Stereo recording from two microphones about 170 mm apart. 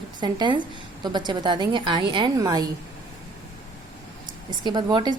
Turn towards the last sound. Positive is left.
turn(degrees=-25)  # may be behind; listen again after turning